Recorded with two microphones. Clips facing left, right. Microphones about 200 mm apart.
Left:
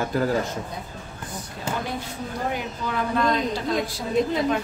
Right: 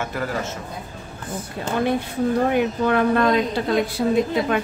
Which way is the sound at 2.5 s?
60° right (ahead or behind).